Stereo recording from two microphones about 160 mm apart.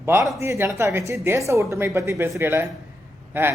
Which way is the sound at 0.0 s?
15° right (ahead or behind).